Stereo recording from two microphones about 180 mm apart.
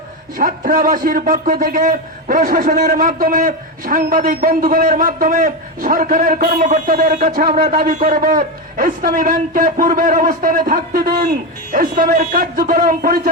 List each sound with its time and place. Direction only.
0.3 s a man's voice: 50° right (ahead or behind)